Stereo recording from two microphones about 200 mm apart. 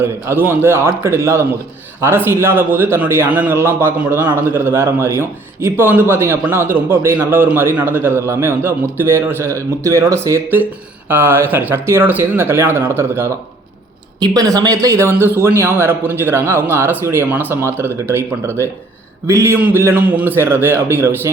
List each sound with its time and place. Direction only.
0.0 s a man's voice: 10° right (ahead or behind)